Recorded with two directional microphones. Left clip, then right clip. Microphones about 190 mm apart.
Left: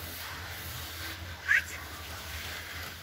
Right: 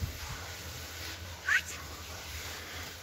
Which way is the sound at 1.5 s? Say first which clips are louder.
Left 3 dB; 25° right (ahead or behind).